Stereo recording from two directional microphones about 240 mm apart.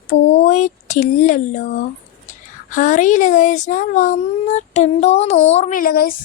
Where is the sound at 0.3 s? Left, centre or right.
Left.